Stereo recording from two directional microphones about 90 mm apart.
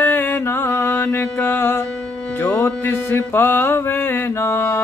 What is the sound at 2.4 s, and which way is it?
Music, 20° left (ahead or behind).